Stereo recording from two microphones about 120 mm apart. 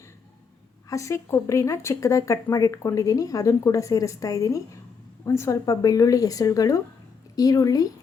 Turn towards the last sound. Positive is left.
turn(degrees=30)  # may be behind; listen again after turning